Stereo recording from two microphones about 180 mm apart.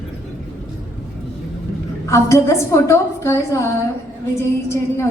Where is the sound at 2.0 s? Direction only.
15° left (ahead or behind).